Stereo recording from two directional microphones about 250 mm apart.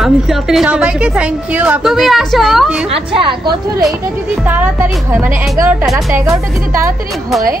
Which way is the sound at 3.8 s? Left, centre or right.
Centre.